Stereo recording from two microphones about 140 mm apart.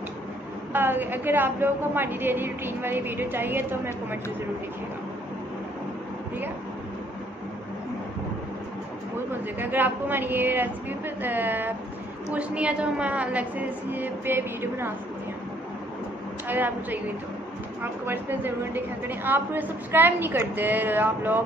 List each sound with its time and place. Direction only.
0.7 s a woman's voice: 15° right (ahead or behind)
9.3 s a woman's voice: 15° right (ahead or behind)
16.4 s a woman's voice: 15° right (ahead or behind)
18.0 s a woman's voice: 15° right (ahead or behind)